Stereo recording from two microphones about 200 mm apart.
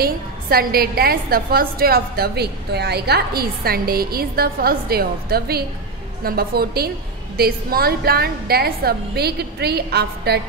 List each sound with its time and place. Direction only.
0.0 s a woman's voice: 50° right (ahead or behind)